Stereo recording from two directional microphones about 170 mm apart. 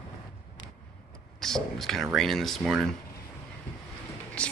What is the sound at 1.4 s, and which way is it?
Speech, centre (ahead or behind).